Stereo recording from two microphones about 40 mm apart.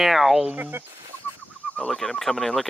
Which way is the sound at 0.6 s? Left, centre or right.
Right.